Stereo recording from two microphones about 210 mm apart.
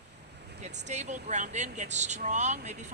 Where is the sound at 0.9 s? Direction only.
35° right (ahead or behind).